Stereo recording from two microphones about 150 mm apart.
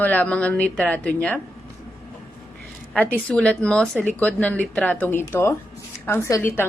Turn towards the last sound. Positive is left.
turn(degrees=15)  # may be behind; listen again after turning